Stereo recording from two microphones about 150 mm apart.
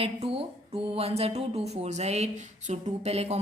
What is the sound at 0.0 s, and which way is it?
Speech, 40° right (ahead or behind).